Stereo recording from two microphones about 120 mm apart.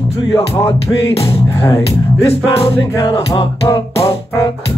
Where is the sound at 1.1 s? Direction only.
50° left (ahead or behind).